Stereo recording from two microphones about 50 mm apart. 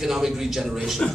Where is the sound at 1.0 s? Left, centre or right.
Centre.